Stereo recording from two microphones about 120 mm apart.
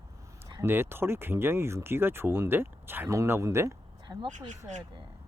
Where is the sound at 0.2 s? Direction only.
25° right (ahead or behind).